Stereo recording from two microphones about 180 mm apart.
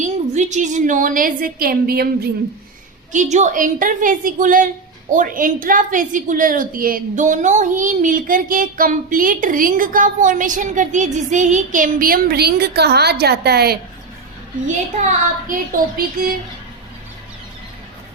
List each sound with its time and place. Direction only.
0.0 s a woman's voice: 40° right (ahead or behind); by 2.3 s 60° right (ahead or behind)
3.1 s a woman's voice: 40° right (ahead or behind); by 13.7 s 60° right (ahead or behind)
15.0 s a woman's voice: 50° right (ahead or behind)